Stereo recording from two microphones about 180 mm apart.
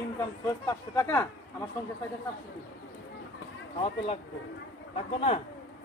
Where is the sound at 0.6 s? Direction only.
15° left (ahead or behind).